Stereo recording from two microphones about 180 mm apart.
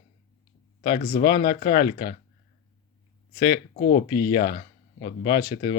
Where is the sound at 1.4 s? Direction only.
60° left (ahead or behind).